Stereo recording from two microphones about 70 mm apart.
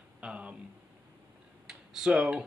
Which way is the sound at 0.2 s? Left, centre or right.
Centre.